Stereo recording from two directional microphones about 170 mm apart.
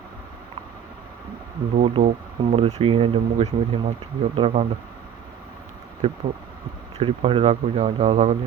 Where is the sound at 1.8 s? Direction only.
35° right (ahead or behind).